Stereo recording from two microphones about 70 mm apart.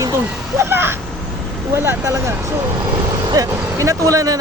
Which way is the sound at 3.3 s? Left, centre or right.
Right.